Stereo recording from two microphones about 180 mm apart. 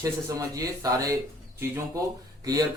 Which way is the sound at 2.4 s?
20° right (ahead or behind).